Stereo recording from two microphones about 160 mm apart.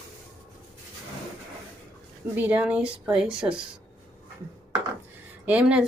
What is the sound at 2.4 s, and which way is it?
Speech, 10° right (ahead or behind).